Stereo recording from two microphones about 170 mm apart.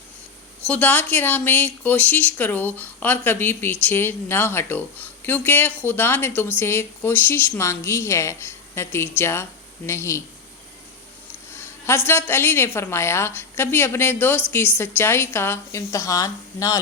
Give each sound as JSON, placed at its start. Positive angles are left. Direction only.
{"t": 0.7, "sound": "speech", "side_deg": 10}
{"t": 11.5, "sound": "speech", "side_deg": 15}